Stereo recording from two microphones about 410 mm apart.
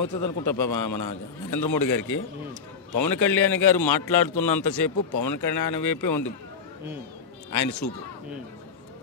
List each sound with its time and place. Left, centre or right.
0.0 s a man's voice: left
3.3 s a man's voice: centre
3.7 s a man's voice: left
7.5 s a man's voice: left